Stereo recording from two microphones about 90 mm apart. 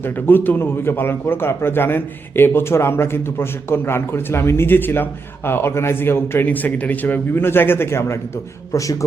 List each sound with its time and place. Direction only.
0.3 s a man's voice: 20° left (ahead or behind); by 9.0 s 40° left (ahead or behind)